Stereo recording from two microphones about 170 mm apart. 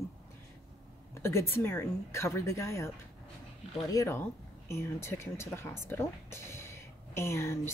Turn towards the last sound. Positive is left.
turn(degrees=15)  # may be behind; listen again after turning